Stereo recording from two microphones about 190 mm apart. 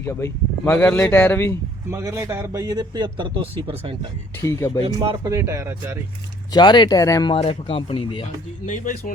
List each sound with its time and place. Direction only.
0.0 s speech: 15° left (ahead or behind)
1.9 s a man's voice: 15° right (ahead or behind)
4.4 s speech: 15° left (ahead or behind)
4.8 s a man's voice: 20° right (ahead or behind)
6.5 s speech: 25° left (ahead or behind); by 9.1 s 45° left (ahead or behind)